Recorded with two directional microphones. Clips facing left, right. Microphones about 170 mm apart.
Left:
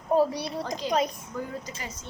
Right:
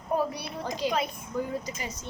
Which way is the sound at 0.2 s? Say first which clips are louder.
Left 6 dB; 30° left (ahead or behind).